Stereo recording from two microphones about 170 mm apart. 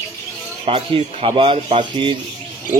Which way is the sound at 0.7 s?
30° right (ahead or behind).